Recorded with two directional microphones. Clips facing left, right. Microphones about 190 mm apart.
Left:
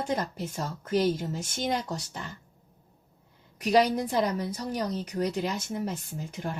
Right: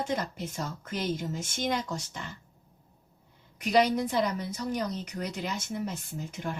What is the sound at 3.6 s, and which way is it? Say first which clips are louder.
A woman's voice: left 1 dB; 35° left (ahead or behind).